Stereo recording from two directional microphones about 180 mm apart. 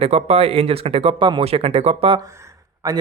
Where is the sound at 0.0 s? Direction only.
35° right (ahead or behind).